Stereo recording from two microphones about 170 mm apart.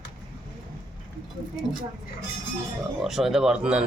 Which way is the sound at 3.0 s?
Centre (ahead or behind).